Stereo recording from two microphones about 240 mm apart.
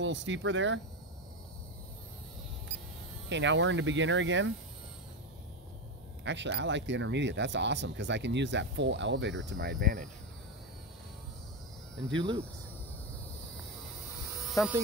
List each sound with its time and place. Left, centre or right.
0.0 s speech: right
3.3 s speech: right
6.2 s speech: right
12.1 s speech: centre
14.4 s a sound: centre